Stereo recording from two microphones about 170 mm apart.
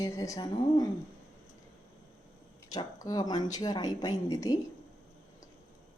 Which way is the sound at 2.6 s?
20° left (ahead or behind).